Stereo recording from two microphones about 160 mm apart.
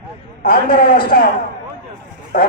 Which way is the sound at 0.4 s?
65° left (ahead or behind).